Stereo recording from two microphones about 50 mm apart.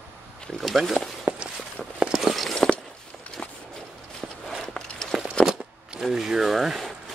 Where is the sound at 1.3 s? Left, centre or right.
Right.